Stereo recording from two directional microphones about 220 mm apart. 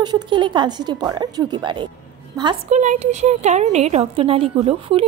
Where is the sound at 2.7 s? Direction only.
35° right (ahead or behind).